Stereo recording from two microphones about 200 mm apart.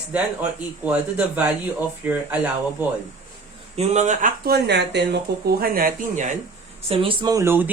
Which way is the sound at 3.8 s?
35° right (ahead or behind).